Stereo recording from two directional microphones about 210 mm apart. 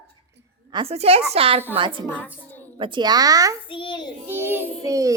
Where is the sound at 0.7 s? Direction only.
30° right (ahead or behind).